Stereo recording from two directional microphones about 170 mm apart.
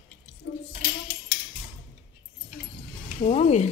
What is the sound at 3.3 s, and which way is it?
Speech, 40° left (ahead or behind).